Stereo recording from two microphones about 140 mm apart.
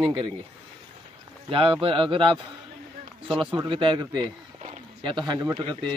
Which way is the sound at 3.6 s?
35° right (ahead or behind).